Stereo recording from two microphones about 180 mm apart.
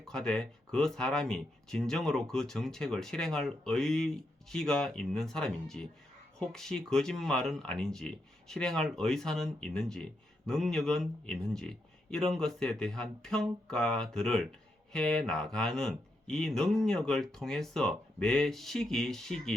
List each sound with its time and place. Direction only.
0.0 s speech: 5° left (ahead or behind)